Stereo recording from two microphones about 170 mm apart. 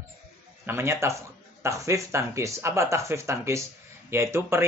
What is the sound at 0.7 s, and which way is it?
Speech, 15° right (ahead or behind).